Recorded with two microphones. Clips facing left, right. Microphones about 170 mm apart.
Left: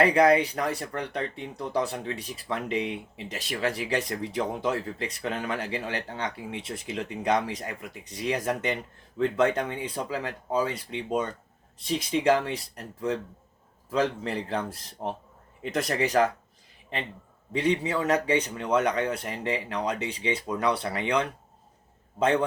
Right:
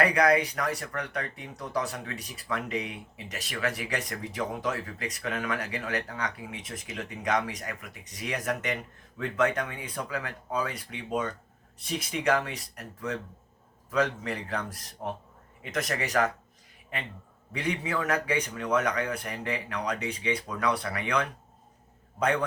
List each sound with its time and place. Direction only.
0.0 s speech: 25° left (ahead or behind)
17.5 s speech: 25° left (ahead or behind)